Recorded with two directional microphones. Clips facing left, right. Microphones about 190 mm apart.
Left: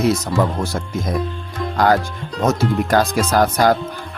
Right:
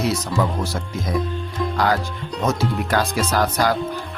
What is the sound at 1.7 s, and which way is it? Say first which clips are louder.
Music: left 5 dB; 50° left (ahead or behind).